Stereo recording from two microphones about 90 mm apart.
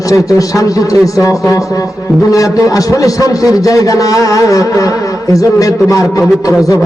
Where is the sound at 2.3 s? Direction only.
40° left (ahead or behind).